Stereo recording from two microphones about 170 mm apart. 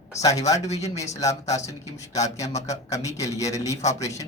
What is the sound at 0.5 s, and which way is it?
Speech, 40° left (ahead or behind).